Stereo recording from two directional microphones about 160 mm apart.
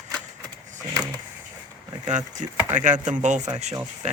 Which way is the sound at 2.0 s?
50° right (ahead or behind).